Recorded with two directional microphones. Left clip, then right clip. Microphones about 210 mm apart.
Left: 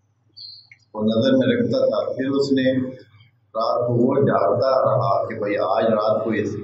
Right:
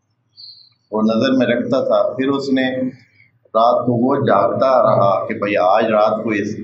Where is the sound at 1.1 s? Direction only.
35° right (ahead or behind).